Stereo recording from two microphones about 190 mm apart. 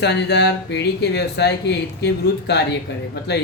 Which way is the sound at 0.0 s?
65° left (ahead or behind).